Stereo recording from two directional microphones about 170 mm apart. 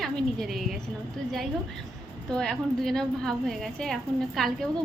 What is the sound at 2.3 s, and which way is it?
A woman's voice, 5° left (ahead or behind).